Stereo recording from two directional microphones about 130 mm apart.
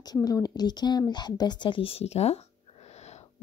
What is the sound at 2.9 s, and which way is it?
Wheeze, 60° left (ahead or behind).